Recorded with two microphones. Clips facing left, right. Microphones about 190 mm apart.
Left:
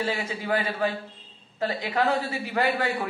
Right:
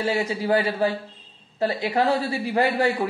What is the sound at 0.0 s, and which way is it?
A man's voice, 35° right (ahead or behind).